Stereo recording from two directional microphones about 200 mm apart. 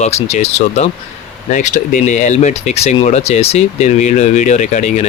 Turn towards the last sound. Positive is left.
turn(degrees=35)  # may be behind; listen again after turning